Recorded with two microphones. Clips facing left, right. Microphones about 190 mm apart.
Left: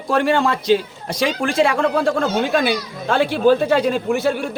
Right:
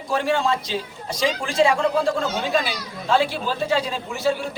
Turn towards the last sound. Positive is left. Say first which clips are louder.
# left 4 dB
turn(degrees=55)  # may be behind; listen again after turning